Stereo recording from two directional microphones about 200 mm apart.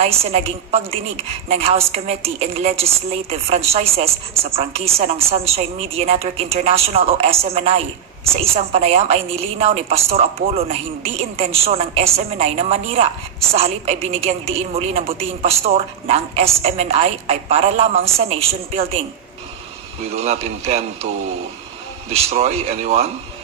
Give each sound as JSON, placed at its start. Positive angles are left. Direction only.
{"t": 0.0, "sound": "a woman's voice", "side_deg": -30}
{"t": 22.1, "sound": "a woman's voice", "side_deg": -30}